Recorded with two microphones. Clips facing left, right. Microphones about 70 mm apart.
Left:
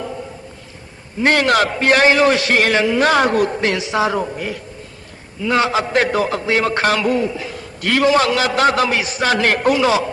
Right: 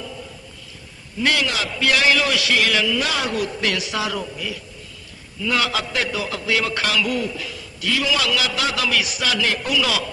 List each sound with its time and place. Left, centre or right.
1.2 s a man's voice: left
1.8 s a man's voice: left
3.7 s a man's voice: left
5.4 s a man's voice: left
7.8 s a man's voice: left